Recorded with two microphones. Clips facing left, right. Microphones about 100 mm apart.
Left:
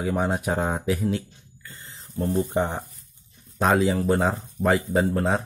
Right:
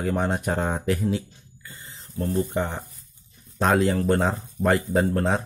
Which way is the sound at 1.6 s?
5° right (ahead or behind).